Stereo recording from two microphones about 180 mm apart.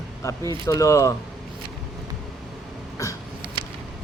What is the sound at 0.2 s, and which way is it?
Speech, 15° left (ahead or behind).